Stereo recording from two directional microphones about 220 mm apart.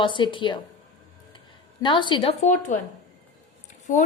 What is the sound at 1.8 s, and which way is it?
Speech, 20° left (ahead or behind).